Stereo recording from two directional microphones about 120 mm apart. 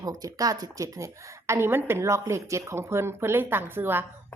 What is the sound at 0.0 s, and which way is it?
A woman's voice, 30° right (ahead or behind).